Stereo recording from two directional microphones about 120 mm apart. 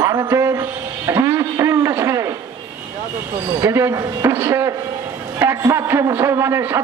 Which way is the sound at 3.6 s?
20° right (ahead or behind).